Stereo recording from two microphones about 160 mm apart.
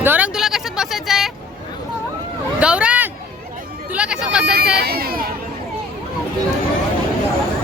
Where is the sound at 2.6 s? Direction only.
5° right (ahead or behind).